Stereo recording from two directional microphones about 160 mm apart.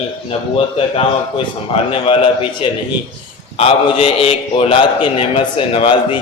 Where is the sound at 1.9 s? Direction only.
35° left (ahead or behind).